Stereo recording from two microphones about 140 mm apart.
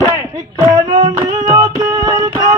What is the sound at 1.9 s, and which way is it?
Music, 30° right (ahead or behind).